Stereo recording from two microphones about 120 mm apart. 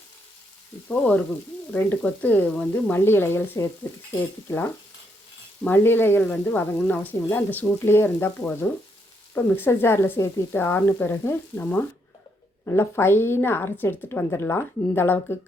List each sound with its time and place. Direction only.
0.9 s a woman's voice: 10° left (ahead or behind)